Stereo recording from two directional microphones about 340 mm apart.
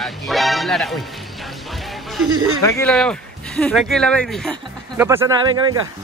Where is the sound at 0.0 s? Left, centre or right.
Centre.